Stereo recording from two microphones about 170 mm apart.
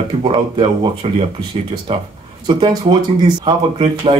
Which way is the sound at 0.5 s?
30° right (ahead or behind).